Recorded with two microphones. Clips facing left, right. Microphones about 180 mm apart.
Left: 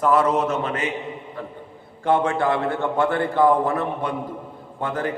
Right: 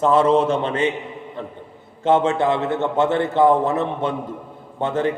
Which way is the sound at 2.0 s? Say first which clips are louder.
Right 3 dB; 20° right (ahead or behind).